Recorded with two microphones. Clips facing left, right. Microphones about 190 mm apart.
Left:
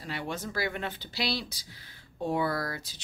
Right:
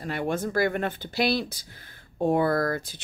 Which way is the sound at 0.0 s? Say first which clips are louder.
Right 8 dB; 50° right (ahead or behind).